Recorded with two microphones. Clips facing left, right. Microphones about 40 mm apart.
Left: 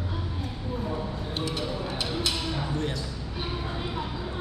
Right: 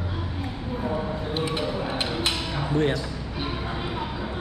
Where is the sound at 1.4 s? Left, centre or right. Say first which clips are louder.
Right 3 dB; right.